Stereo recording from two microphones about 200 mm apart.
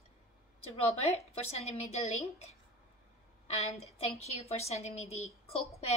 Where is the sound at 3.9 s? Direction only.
30° left (ahead or behind).